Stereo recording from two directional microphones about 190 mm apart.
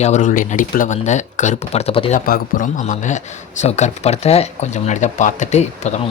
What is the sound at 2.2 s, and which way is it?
Speech, 45° left (ahead or behind).